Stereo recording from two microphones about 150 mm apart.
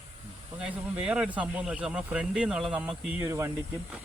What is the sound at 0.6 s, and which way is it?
Speech, 5° right (ahead or behind).